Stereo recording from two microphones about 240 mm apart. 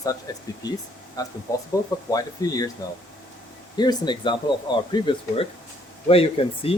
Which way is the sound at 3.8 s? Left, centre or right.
Centre.